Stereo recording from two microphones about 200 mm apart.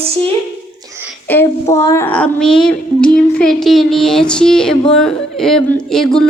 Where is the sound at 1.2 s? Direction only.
10° left (ahead or behind).